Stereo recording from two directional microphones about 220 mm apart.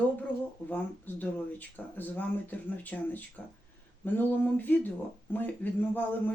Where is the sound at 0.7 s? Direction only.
10° left (ahead or behind).